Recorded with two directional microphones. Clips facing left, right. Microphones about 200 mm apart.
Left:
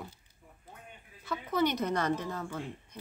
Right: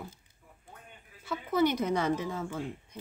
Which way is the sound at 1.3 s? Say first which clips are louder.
Right 2 dB; 10° right (ahead or behind).